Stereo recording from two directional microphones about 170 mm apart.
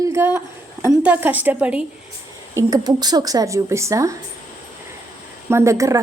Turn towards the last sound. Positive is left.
turn(degrees=-20)  # may be behind; listen again after turning